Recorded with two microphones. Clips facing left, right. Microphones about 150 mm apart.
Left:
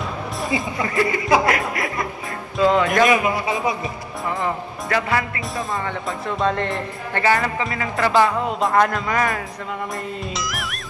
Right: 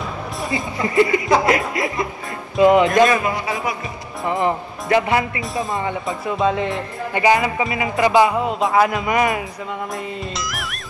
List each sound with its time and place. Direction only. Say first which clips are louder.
0.8 s speech: right 6 dB; 25° right (ahead or behind)
3.1 s a man's voice: left 1 dB; 15° left (ahead or behind)
4.3 s speech: right 5 dB; 20° right (ahead or behind)
6.0 s speech: right 2 dB; 5° right (ahead or behind)
7.2 s speech: right 3 dB; 15° right (ahead or behind)
8.5 s speech: right 1 dB; centre (ahead or behind)
9.0 s speech: right 3 dB; 15° right (ahead or behind)
10.3 s speech: even; centre (ahead or behind)